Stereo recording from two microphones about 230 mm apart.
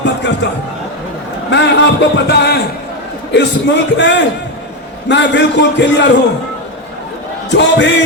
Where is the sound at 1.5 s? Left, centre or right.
Left.